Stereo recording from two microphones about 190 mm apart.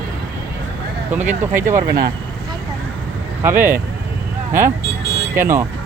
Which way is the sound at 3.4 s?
10° right (ahead or behind).